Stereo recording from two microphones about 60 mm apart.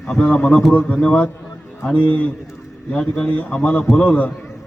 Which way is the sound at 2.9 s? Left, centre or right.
Left.